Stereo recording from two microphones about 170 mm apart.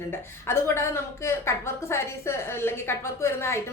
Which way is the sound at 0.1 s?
15° left (ahead or behind).